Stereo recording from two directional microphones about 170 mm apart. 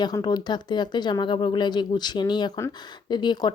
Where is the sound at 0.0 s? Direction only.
25° left (ahead or behind).